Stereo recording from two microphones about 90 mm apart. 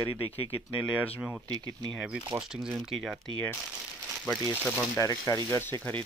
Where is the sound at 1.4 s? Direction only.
55° right (ahead or behind).